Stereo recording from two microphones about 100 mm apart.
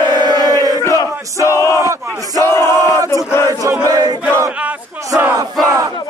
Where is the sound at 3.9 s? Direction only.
40° right (ahead or behind).